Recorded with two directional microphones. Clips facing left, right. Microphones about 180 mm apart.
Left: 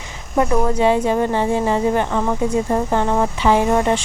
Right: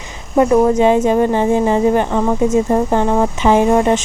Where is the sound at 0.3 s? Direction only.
20° right (ahead or behind).